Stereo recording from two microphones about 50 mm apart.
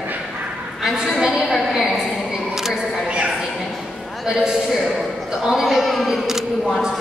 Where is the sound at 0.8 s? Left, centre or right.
Centre.